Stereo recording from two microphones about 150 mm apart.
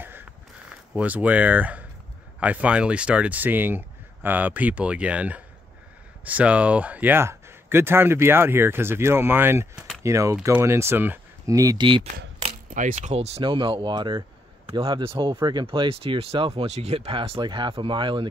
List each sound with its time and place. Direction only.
0.0 s a sound: 15° right (ahead or behind)
0.9 s speech: 10° right (ahead or behind); by 12.1 s 35° right (ahead or behind)
12.4 s speech: 55° right (ahead or behind); by 18.3 s 35° right (ahead or behind)